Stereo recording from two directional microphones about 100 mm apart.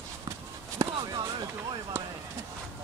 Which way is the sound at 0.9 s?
50° right (ahead or behind).